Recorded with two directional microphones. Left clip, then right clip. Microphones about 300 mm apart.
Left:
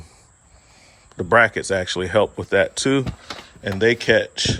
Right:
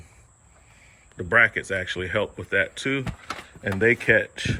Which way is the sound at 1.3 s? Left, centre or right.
Centre.